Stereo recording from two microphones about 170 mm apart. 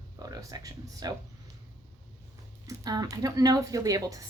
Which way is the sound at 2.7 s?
20° right (ahead or behind).